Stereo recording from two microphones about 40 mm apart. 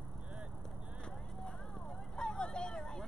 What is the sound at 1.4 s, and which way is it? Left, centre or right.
Vehicle, left.